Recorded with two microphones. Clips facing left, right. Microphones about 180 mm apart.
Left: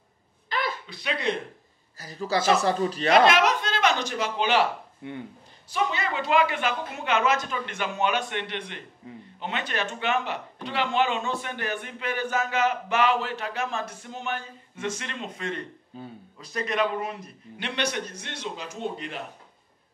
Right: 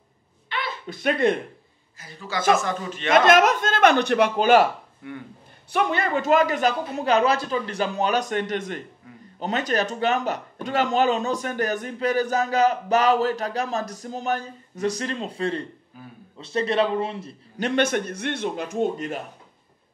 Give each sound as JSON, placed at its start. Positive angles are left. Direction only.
{"t": 0.5, "sound": "a sound", "side_deg": 40}
{"t": 0.8, "sound": "a man's voice", "side_deg": -50}
{"t": 2.0, "sound": "speech", "side_deg": 40}
{"t": 3.3, "sound": "speech", "side_deg": -50}
{"t": 4.4, "sound": "a man's voice", "side_deg": -45}
{"t": 5.0, "sound": "speech", "side_deg": 25}
{"t": 5.7, "sound": "speech", "side_deg": -55}
{"t": 9.0, "sound": "speech", "side_deg": 25}
{"t": 9.4, "sound": "speech", "side_deg": -40}
{"t": 15.9, "sound": "speech", "side_deg": 25}
{"t": 16.3, "sound": "a man's voice", "side_deg": -30}
{"t": 17.6, "sound": "a man's voice", "side_deg": -45}